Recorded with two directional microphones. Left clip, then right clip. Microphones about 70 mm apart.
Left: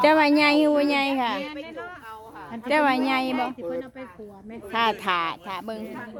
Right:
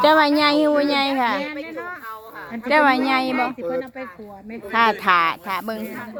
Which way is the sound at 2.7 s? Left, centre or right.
Centre.